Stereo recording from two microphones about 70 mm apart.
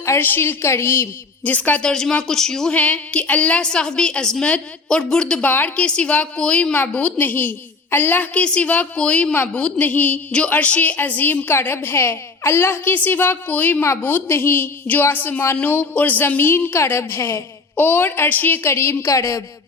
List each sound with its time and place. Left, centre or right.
0.2 s a woman's voice: left
1.5 s a woman's voice: left
1.9 s a woman's voice: centre
2.7 s a woman's voice: centre
5.5 s a woman's voice: left
17.7 s a woman's voice: left
18.6 s a woman's voice: left